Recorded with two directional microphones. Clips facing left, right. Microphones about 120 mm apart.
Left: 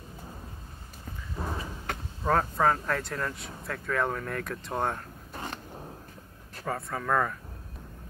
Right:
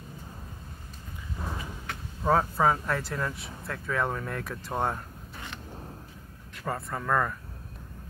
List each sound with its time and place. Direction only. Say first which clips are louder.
1.4 s a sound: left 3 dB; 35° left (ahead or behind)
1.9 s vehicle: left 5 dB; 50° left (ahead or behind)
2.2 s speech: right 1 dB; 5° right (ahead or behind)
5.3 s creak: left 6 dB; 40° left (ahead or behind)
6.6 s speech: even; centre (ahead or behind)